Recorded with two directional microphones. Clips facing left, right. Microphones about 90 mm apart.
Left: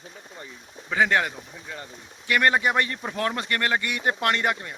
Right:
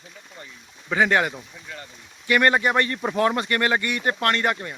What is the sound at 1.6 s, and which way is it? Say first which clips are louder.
Speech: left 3 dB; 25° left (ahead or behind).